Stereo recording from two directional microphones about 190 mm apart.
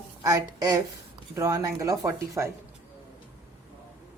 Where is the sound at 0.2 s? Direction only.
20° right (ahead or behind).